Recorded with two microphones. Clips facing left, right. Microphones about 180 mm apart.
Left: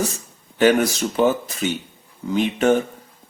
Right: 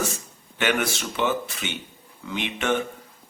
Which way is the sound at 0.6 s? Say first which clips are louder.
Left 8 dB; 40° left (ahead or behind).